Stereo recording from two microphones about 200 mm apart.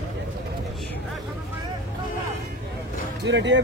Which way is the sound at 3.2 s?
60° right (ahead or behind).